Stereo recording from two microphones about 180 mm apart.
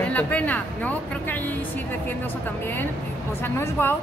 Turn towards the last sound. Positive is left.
turn(degrees=15)  # may be behind; listen again after turning